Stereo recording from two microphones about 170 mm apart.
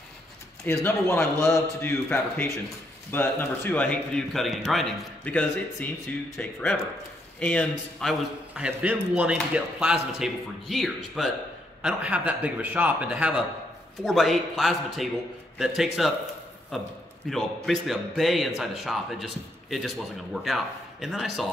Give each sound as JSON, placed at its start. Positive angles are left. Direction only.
{"t": 0.7, "sound": "a man's voice", "side_deg": 15}